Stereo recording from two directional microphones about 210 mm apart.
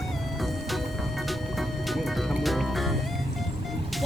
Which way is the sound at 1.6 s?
Centre (ahead or behind).